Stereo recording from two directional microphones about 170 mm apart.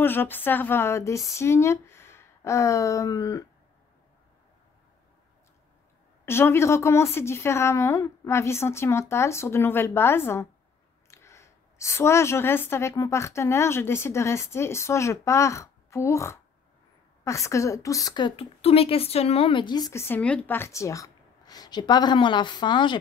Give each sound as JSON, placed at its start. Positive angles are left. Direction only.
{"t": 0.0, "sound": "a woman's voice", "side_deg": 10}
{"t": 6.2, "sound": "a woman's voice", "side_deg": 15}